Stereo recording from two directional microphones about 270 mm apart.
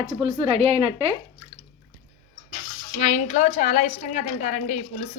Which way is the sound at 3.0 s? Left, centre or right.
Left.